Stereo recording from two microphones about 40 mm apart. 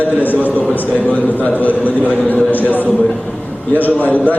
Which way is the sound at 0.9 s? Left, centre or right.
Left.